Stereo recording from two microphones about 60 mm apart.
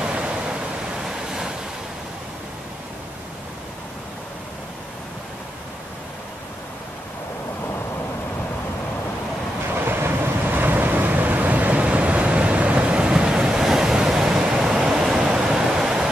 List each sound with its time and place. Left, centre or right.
0.0 s waves: centre
9.8 s vehicle: right; by 16.1 s centre